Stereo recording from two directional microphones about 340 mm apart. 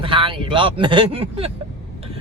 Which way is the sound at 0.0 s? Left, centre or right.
Centre.